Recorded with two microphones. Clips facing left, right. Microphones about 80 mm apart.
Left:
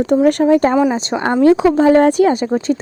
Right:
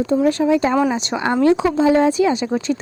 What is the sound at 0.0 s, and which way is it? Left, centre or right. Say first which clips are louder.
Speech: left 4 dB; left.